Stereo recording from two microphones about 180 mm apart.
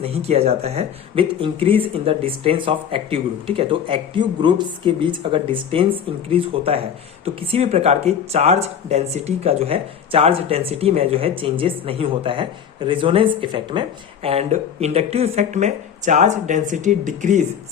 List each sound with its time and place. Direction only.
0.0 s speech: 35° right (ahead or behind)